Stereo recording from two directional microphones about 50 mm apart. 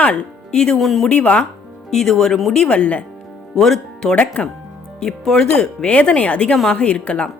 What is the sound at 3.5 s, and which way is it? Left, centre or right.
Speech, centre.